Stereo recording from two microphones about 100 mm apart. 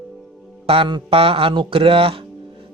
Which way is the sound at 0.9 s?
60° right (ahead or behind).